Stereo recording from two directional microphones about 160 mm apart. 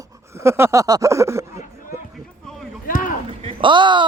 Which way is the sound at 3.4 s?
35° right (ahead or behind).